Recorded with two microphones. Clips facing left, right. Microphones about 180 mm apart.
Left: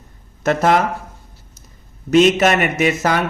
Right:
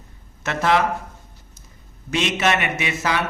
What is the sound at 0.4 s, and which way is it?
Speech, 45° left (ahead or behind).